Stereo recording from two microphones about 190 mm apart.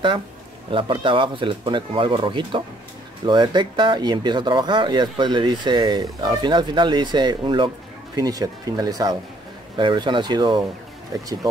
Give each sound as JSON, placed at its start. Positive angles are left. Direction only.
{"t": 0.7, "sound": "speech", "side_deg": -25}